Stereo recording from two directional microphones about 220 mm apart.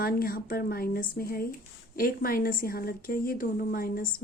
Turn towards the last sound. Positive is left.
turn(degrees=40)  # may be behind; listen again after turning